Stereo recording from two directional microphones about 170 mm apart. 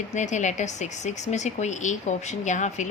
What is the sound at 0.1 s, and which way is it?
Speech, 45° left (ahead or behind).